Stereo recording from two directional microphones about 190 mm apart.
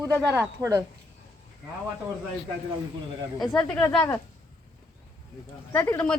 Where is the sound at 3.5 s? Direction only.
5° left (ahead or behind).